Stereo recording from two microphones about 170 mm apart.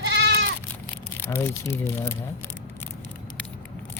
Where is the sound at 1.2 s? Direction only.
15° left (ahead or behind).